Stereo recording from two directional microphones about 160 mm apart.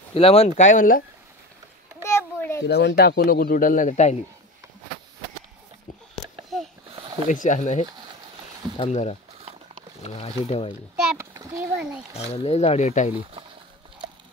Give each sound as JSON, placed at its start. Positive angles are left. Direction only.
{"t": 0.1, "sound": "speech", "side_deg": 40}
{"t": 2.0, "sound": "a sound", "side_deg": 15}
{"t": 2.7, "sound": "speech", "side_deg": 90}
{"t": 7.2, "sound": "speech", "side_deg": 50}
{"t": 11.1, "sound": "a sound", "side_deg": -20}
{"t": 11.7, "sound": "speech", "side_deg": -5}
{"t": 12.1, "sound": "speech", "side_deg": 40}